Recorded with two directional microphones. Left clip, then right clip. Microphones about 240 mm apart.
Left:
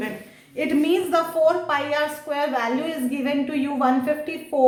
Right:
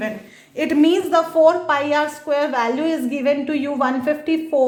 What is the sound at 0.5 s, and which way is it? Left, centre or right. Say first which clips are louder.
A woman's voice: right 4 dB; right.